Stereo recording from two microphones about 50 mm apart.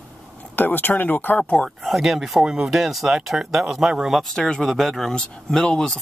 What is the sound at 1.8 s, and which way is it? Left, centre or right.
Speech, centre.